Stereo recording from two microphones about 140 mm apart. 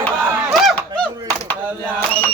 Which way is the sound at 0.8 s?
10° left (ahead or behind).